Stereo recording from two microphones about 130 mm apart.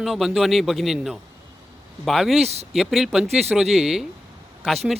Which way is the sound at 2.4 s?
55° right (ahead or behind).